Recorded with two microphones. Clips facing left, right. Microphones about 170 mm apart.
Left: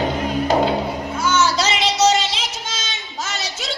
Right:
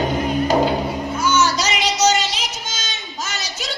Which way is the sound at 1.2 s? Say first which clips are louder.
Even; 30° left (ahead or behind).